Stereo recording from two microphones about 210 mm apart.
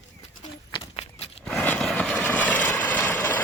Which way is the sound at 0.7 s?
20° left (ahead or behind).